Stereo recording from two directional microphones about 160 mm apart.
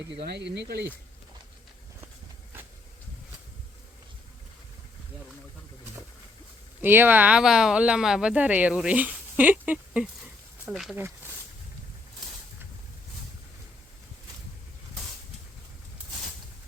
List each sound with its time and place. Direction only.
0.3 s speech: 90° right
6.8 s speech: 10° right (ahead or behind)